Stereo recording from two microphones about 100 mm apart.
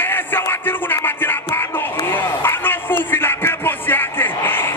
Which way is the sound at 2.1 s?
20° left (ahead or behind).